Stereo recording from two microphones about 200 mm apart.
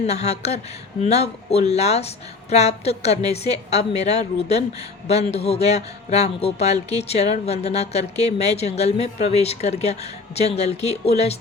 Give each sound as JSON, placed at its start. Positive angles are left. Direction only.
{"t": 0.0, "sound": "a man's voice", "side_deg": 30}